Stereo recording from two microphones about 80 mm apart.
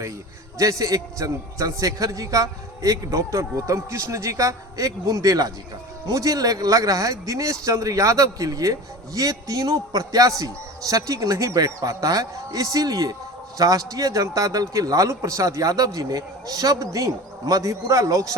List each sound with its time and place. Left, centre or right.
0.6 s speech: right